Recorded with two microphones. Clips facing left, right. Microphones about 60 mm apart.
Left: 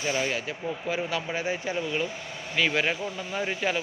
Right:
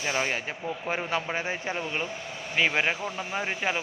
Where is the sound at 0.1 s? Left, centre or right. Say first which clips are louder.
Even; right.